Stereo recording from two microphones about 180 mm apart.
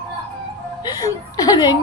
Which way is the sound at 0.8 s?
20° left (ahead or behind).